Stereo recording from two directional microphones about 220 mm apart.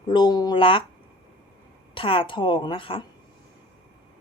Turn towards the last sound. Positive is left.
turn(degrees=25)  # may be behind; listen again after turning